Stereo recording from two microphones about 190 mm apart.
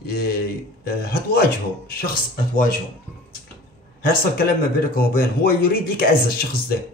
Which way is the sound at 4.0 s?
50° left (ahead or behind).